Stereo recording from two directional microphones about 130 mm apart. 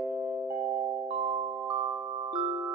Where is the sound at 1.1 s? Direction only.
50° right (ahead or behind).